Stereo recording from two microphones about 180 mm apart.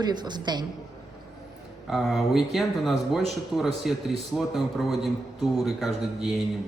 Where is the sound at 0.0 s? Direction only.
25° right (ahead or behind).